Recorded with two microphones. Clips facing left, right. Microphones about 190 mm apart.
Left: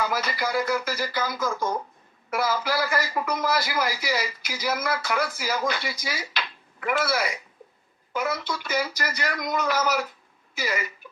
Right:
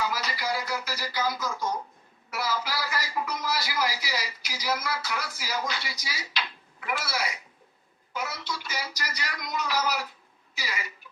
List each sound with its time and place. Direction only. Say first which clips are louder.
0.0 s a man's voice: left 4 dB; 50° left (ahead or behind)